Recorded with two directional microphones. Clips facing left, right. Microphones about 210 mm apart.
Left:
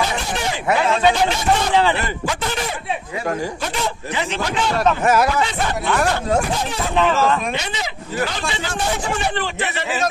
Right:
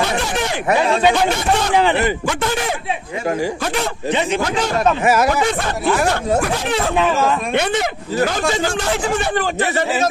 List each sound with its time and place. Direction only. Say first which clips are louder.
1.8 s speech: right 3 dB; 20° right (ahead or behind)
4.1 s speech: right 6 dB; 20° right (ahead or behind)
5.0 s speech: right 2 dB; 5° right (ahead or behind)
6.5 s speech: right 4 dB; 75° right (ahead or behind)
7.0 s speech: left 2 dB; 10° right (ahead or behind)
7.5 s speech: right 8 dB; 55° right (ahead or behind)